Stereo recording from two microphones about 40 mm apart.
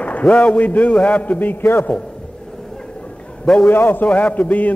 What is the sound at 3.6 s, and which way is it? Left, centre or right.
Speech, left.